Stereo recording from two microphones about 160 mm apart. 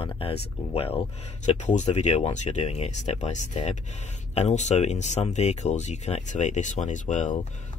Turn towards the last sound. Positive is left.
turn(degrees=50)  # may be behind; listen again after turning